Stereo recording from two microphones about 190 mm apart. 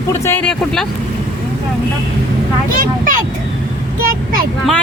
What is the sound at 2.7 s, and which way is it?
Speech, 45° right (ahead or behind).